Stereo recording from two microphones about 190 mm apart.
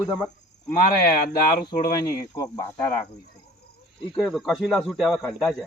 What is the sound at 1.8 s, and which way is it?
Speech, 20° left (ahead or behind).